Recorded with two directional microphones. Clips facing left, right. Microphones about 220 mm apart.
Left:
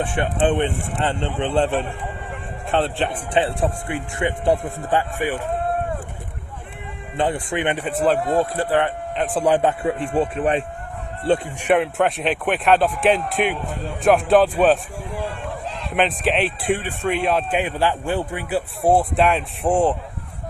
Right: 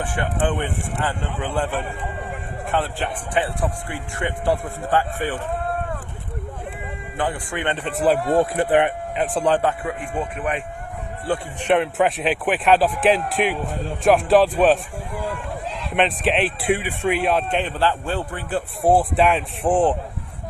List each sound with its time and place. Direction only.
0.0 s speech: 25° left (ahead or behind)
7.2 s speech: 25° left (ahead or behind)
7.9 s a man's voice: centre (ahead or behind)
8.3 s speech: 15° right (ahead or behind)
9.1 s a man's voice: centre (ahead or behind)
9.4 s speech: 15° left (ahead or behind)
11.6 s a man's voice: centre (ahead or behind)
15.9 s a man's voice: centre (ahead or behind)
17.6 s a man's voice: 10° left (ahead or behind)
18.8 s a man's voice: centre (ahead or behind)